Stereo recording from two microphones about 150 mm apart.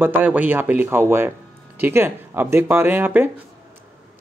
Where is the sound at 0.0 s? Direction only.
10° right (ahead or behind).